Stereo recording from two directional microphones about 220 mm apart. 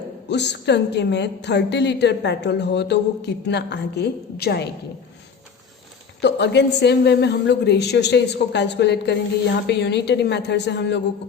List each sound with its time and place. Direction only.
0.3 s a woman's voice: 50° left (ahead or behind)
6.2 s a woman's voice: 50° left (ahead or behind)